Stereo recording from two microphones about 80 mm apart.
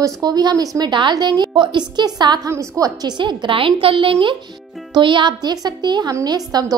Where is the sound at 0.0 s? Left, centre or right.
Right.